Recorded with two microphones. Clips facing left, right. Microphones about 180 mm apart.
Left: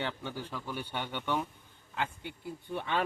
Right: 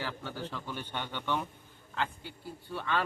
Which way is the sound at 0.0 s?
15° left (ahead or behind).